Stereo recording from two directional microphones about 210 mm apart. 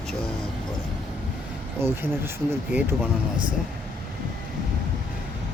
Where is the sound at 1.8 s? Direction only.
10° right (ahead or behind).